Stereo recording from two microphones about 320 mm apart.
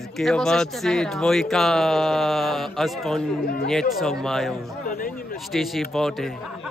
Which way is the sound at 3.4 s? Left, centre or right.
Left.